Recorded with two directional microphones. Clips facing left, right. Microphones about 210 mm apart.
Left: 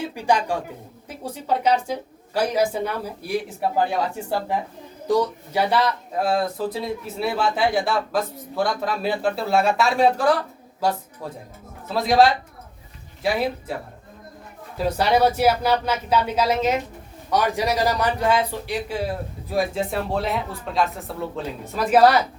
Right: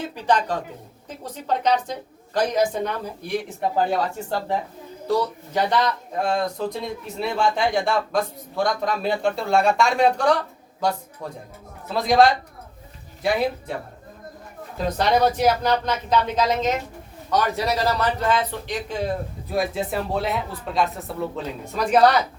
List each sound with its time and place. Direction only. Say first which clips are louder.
0.0 s a man's voice: even; 10° left (ahead or behind)
14.8 s speech: left 1 dB; 10° left (ahead or behind)